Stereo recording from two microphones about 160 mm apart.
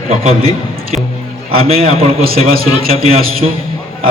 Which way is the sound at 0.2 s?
40° right (ahead or behind).